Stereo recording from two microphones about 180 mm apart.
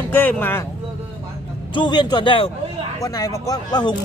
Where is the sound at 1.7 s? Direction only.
25° left (ahead or behind).